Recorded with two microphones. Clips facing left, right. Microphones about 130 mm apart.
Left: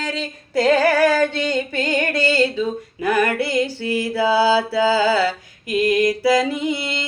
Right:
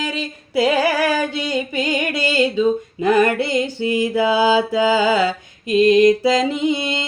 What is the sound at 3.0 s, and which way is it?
Mantra, 25° right (ahead or behind).